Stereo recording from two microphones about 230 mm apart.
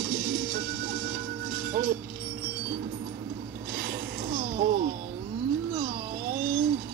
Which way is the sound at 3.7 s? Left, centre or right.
Right.